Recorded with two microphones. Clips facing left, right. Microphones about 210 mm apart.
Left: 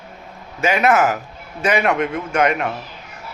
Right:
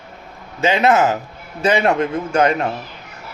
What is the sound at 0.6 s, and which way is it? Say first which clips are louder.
A man's voice: right 1 dB; 25° right (ahead or behind).